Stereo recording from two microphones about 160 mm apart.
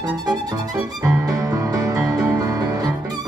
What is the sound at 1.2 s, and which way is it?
Music, 20° right (ahead or behind).